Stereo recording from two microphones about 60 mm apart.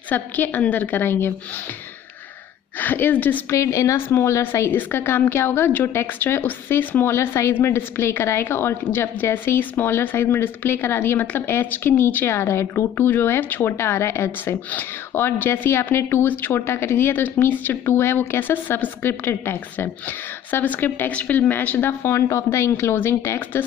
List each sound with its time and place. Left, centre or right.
0.1 s a woman's voice: left
2.8 s a woman's voice: left
3.4 s a woman's voice: left
7.1 s a woman's voice: left
10.7 s a woman's voice: left
12.4 s a woman's voice: left
13.7 s a woman's voice: left
16.3 s a woman's voice: left
22.1 s a woman's voice: left